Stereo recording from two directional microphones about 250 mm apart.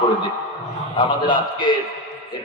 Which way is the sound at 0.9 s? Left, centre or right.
Centre.